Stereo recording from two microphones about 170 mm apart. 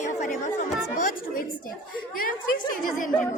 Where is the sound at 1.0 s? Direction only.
55° left (ahead or behind).